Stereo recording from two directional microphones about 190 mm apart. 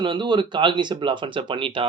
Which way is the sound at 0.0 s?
25° right (ahead or behind).